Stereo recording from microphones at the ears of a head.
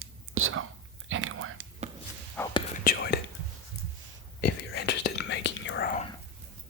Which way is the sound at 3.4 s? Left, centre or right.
Right.